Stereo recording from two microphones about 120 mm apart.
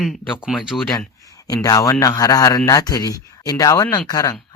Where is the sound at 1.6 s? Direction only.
30° left (ahead or behind).